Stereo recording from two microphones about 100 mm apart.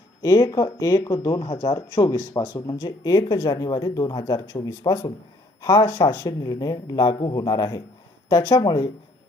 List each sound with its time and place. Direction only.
0.2 s speech: 35° left (ahead or behind)
7.3 s speech: 35° left (ahead or behind)